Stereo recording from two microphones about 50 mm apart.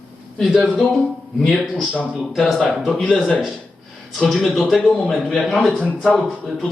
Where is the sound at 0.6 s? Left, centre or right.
Centre.